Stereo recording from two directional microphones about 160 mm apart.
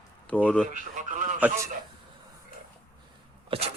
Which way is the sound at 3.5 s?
35° right (ahead or behind).